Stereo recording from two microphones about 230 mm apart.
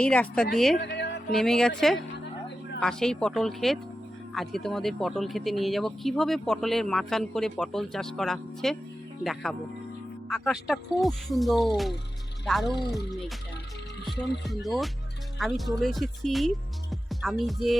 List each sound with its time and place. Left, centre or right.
0.0 s speech: centre
0.8 s music: left
1.3 s speech: centre
14.4 s speech: centre